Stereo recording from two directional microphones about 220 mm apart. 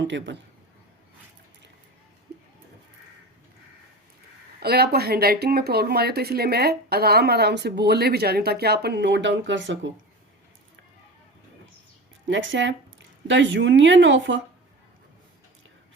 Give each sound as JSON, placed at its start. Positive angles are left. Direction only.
{"t": 0.1, "sound": "speech", "side_deg": -55}
{"t": 4.6, "sound": "speech", "side_deg": -45}
{"t": 12.3, "sound": "a woman's voice", "side_deg": -55}